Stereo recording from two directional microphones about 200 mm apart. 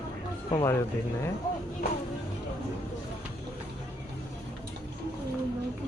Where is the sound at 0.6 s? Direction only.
15° left (ahead or behind).